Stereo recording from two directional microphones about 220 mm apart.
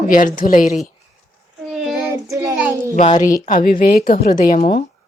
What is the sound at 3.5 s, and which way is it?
A woman's voice, 40° left (ahead or behind).